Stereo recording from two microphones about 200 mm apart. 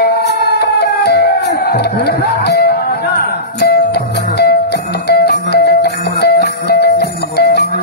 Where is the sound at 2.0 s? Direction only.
55° left (ahead or behind).